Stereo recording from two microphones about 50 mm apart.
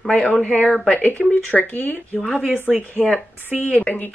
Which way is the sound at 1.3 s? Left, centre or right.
Left.